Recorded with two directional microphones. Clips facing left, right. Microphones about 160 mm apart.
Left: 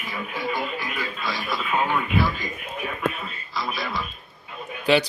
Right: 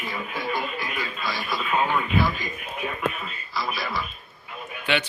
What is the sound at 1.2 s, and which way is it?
Speech, 10° right (ahead or behind).